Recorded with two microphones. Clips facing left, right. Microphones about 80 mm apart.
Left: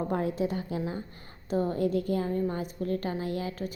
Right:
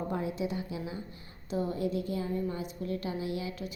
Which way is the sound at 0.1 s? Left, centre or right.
Left.